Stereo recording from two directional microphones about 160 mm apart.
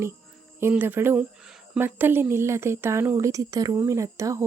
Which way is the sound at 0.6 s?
15° right (ahead or behind).